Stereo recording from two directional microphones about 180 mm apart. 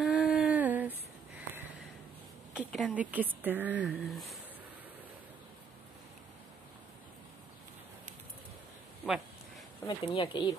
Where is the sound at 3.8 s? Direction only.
5° left (ahead or behind).